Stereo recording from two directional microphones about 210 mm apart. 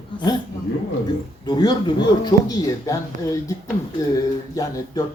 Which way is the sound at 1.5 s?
20° left (ahead or behind).